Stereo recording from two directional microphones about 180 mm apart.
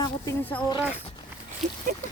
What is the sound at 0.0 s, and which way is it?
Speech, 15° left (ahead or behind).